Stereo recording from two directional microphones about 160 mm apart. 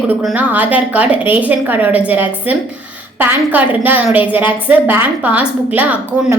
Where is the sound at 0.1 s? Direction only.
5° right (ahead or behind).